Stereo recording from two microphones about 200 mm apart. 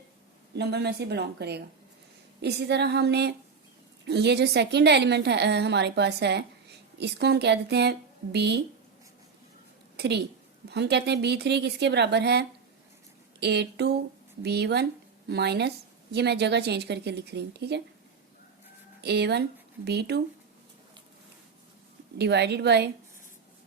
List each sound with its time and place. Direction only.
0.5 s a woman's voice: 55° right (ahead or behind)
10.0 s a woman's voice: 55° right (ahead or behind)
19.0 s a woman's voice: 55° right (ahead or behind)
22.2 s a woman's voice: 55° right (ahead or behind)